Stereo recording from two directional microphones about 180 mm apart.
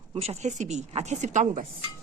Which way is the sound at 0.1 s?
35° right (ahead or behind).